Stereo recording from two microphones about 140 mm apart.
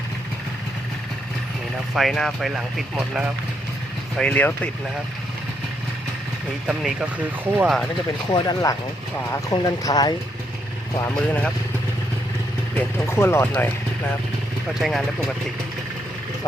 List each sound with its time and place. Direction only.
2.0 s speech: centre (ahead or behind)
4.2 s speech: 10° left (ahead or behind)
6.7 s speech: 10° right (ahead or behind)
8.3 s speech: 30° left (ahead or behind)
12.7 s speech: 15° left (ahead or behind)
14.8 s speech: centre (ahead or behind)